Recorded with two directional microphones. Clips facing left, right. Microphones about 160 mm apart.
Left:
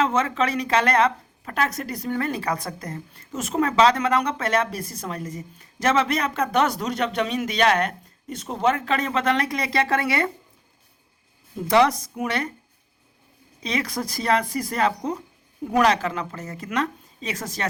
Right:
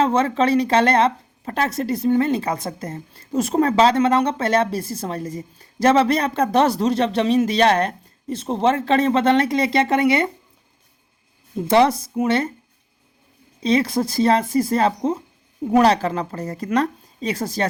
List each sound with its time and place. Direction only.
0.0 s speech: 30° right (ahead or behind)
11.5 s speech: 30° right (ahead or behind)
13.6 s speech: 30° right (ahead or behind)